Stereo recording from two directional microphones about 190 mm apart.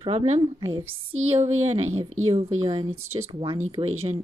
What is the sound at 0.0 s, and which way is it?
Speech, 30° right (ahead or behind).